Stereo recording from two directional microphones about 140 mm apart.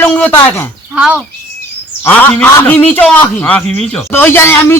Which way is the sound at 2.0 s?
10° left (ahead or behind).